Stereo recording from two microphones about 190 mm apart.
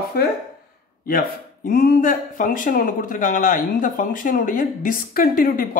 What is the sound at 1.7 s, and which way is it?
Speech, 50° left (ahead or behind).